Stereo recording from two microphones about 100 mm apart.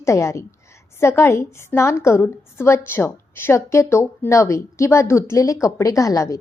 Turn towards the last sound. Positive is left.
turn(degrees=35)  # may be behind; listen again after turning